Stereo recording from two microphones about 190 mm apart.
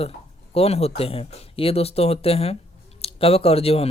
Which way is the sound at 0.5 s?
30° left (ahead or behind).